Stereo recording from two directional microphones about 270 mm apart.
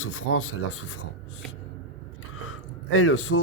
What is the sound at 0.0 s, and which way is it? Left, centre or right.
Speech, left.